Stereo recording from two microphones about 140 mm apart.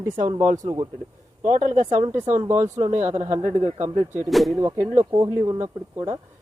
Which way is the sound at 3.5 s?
40° right (ahead or behind).